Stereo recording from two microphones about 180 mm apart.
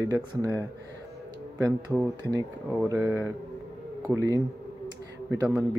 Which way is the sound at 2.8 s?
15° right (ahead or behind).